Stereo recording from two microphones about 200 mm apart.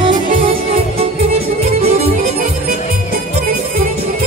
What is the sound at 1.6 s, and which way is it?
Music, 30° right (ahead or behind).